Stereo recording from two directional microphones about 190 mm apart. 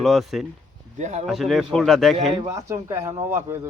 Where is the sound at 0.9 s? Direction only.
35° right (ahead or behind).